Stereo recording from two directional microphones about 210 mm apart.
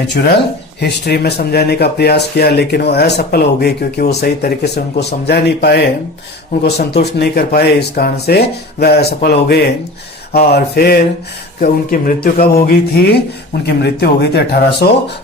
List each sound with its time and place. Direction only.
0.8 s speech: 50° left (ahead or behind)